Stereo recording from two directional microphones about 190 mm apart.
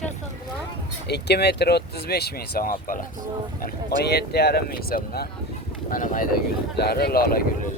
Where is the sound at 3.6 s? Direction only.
60° left (ahead or behind).